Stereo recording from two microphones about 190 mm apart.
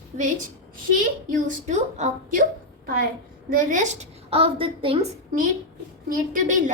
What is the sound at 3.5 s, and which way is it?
A woman's voice, 40° right (ahead or behind).